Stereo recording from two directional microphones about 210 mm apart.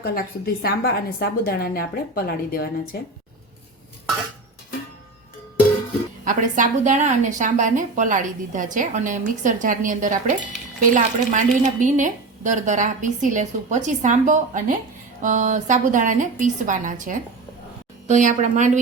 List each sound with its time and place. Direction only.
0.0 s a woman's voice: 45° left (ahead or behind)
6.2 s a woman's voice: 35° right (ahead or behind)